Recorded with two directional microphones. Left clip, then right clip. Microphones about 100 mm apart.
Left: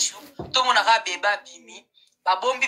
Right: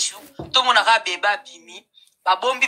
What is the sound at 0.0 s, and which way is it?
A woman's voice, 40° right (ahead or behind).